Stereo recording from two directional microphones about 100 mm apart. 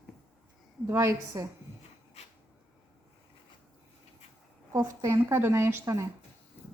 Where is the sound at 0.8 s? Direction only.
25° right (ahead or behind).